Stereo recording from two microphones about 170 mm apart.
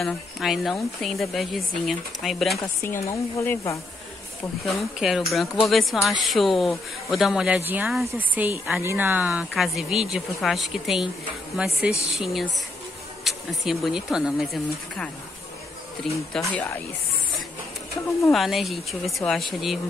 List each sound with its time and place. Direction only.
0.0 s speech: centre (ahead or behind)
2.6 s speech: 15° left (ahead or behind)
4.6 s speech: centre (ahead or behind)
18.3 s speech: centre (ahead or behind)